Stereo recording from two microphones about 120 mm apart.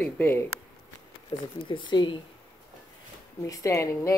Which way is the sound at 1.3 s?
40° left (ahead or behind).